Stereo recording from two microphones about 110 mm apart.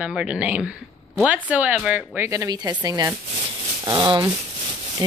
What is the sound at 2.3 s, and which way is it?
Speech, 35° right (ahead or behind).